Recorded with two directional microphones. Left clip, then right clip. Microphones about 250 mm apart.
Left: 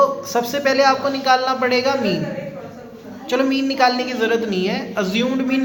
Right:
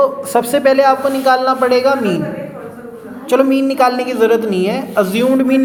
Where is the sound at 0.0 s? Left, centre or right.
Right.